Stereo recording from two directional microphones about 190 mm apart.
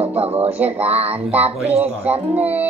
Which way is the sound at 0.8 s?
10° right (ahead or behind).